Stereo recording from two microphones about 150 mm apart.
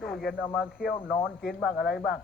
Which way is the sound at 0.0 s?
Centre (ahead or behind).